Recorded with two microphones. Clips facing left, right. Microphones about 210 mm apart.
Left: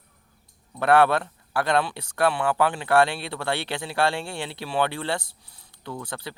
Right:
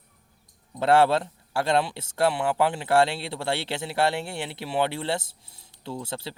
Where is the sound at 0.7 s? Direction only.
25° right (ahead or behind).